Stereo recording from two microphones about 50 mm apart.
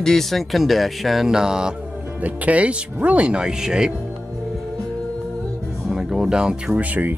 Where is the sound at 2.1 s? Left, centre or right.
Right; by 3.9 s centre.